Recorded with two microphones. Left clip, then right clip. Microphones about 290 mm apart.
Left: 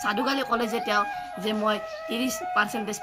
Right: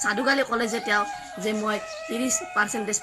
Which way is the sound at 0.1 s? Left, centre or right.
Centre.